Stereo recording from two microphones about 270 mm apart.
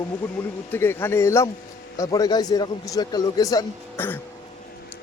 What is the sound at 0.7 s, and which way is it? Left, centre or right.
A man's voice, centre.